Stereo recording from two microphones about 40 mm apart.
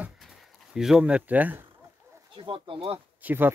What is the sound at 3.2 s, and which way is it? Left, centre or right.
Speech, right.